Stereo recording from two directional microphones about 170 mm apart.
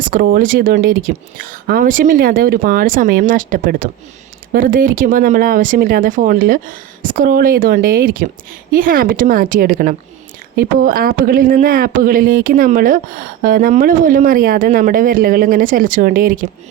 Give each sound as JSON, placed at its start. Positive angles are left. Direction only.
{"t": 0.0, "sound": "speech", "side_deg": -55}